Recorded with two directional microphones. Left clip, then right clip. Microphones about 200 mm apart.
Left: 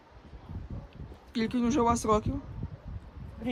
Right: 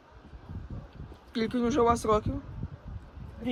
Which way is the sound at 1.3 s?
10° left (ahead or behind).